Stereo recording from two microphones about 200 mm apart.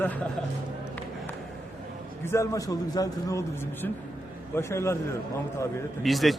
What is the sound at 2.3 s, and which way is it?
A man's voice, 15° left (ahead or behind).